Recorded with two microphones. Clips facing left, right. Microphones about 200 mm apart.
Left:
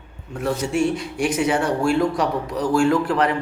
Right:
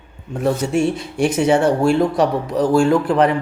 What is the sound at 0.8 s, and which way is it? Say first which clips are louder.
A man's voice: right 3 dB; 25° right (ahead or behind).